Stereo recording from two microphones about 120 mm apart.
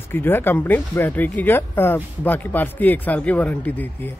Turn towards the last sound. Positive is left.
turn(degrees=15)  # may be behind; listen again after turning